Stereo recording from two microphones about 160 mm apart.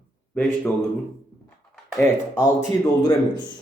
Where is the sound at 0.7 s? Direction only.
10° left (ahead or behind).